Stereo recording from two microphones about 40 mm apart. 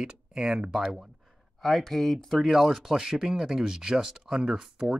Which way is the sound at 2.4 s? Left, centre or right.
Centre.